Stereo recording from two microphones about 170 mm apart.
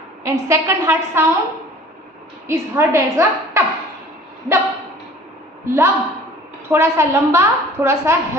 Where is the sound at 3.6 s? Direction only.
15° right (ahead or behind).